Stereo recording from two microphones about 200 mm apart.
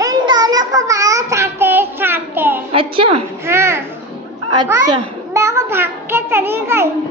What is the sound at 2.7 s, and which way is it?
Speech, 25° right (ahead or behind).